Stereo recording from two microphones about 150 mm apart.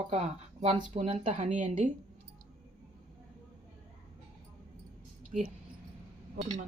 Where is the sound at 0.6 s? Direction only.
45° right (ahead or behind).